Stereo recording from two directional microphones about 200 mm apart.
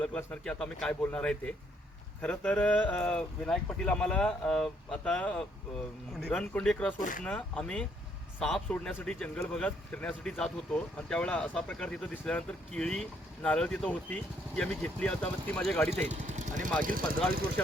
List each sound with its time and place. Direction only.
0.0 s speech: 5° left (ahead or behind)
15.9 s speech: 35° right (ahead or behind)